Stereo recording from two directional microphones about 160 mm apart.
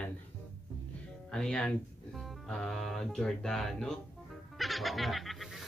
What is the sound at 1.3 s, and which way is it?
Speech, 5° left (ahead or behind).